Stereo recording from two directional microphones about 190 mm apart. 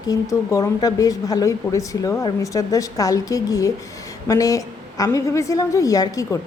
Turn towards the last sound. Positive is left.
turn(degrees=15)  # may be behind; listen again after turning